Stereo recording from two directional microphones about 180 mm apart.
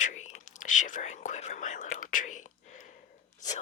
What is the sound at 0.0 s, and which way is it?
Whispering, 45° left (ahead or behind).